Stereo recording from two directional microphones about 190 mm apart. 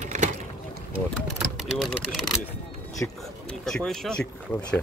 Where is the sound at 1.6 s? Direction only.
Centre (ahead or behind).